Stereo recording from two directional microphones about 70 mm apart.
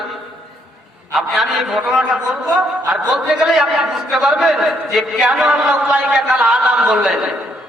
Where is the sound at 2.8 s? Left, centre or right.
Centre.